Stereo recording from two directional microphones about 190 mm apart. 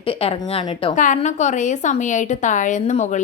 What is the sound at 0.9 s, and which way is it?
A woman's voice, 40° left (ahead or behind).